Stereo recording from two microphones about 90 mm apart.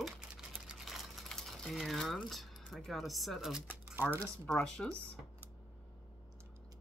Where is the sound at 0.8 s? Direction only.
Centre (ahead or behind).